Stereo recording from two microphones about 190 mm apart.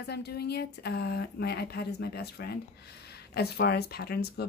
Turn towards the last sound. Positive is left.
turn(degrees=55)  # may be behind; listen again after turning